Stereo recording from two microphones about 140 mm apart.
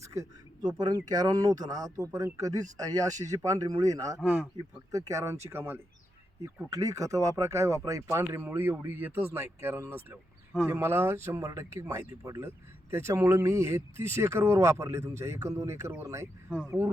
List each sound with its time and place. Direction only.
0.0 s a sound: 20° right (ahead or behind)
0.8 s speech: 30° right (ahead or behind)
4.2 s speech: 5° left (ahead or behind)
4.9 s speech: 25° right (ahead or behind)